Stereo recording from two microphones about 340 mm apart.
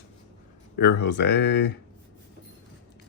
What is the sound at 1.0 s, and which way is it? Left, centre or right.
Speech, left.